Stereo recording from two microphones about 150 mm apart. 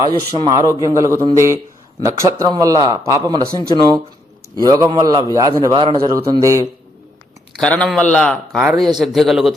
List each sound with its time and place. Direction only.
0.3 s a man's voice: 25° right (ahead or behind)
6.3 s a man's voice: 20° right (ahead or behind)
7.6 s a man's voice: 5° left (ahead or behind)